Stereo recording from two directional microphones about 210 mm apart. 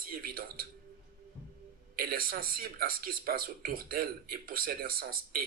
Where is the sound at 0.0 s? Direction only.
45° right (ahead or behind).